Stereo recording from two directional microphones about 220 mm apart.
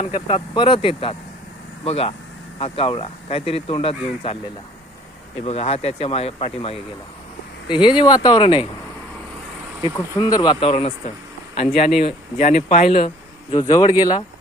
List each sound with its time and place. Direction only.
0.0 s speech: 25° left (ahead or behind)
5.5 s speech: 30° left (ahead or behind)
9.8 s speech: 20° left (ahead or behind)
13.5 s speech: 20° left (ahead or behind)